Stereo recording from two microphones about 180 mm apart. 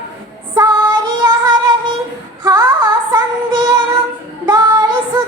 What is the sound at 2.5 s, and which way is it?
Female singing, 20° right (ahead or behind).